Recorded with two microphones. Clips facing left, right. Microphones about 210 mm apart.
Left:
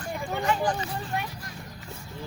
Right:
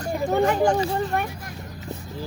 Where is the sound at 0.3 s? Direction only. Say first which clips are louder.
Right 7 dB; 40° right (ahead or behind).